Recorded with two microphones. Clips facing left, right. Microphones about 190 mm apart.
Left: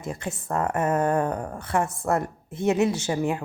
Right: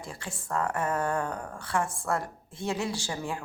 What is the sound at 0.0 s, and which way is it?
Speech, 20° left (ahead or behind).